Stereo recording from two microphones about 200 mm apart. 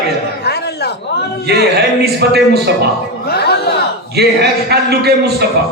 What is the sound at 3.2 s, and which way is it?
Music, 55° left (ahead or behind).